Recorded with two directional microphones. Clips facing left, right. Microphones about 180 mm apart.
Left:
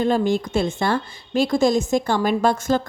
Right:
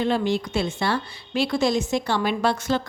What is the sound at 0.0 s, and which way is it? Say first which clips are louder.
A woman's voice: left 3 dB; 45° left (ahead or behind).